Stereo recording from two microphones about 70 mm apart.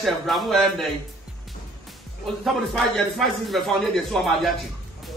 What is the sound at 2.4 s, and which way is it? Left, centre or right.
A man's voice, centre.